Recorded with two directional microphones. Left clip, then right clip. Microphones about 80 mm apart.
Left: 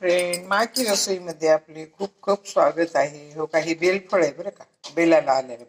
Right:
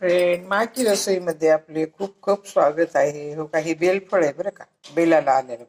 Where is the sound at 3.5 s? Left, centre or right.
Right.